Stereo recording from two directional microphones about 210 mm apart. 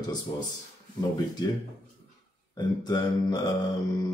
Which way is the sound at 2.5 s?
20° left (ahead or behind).